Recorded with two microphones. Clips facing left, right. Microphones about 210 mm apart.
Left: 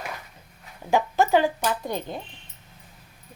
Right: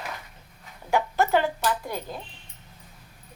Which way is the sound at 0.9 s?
15° left (ahead or behind).